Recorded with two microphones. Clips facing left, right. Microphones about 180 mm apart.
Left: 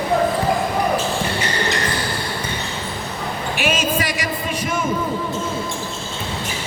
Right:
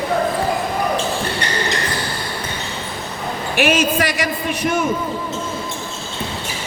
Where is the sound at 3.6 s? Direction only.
65° right (ahead or behind).